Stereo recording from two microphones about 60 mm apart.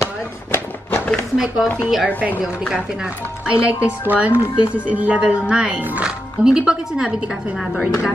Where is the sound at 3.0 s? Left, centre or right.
Right.